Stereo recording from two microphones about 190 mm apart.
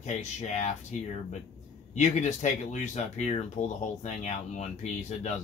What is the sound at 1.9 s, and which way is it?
Speech, 40° left (ahead or behind).